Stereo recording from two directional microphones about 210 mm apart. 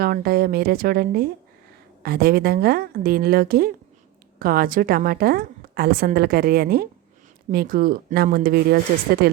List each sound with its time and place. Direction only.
0.0 s a woman's voice: 45° right (ahead or behind)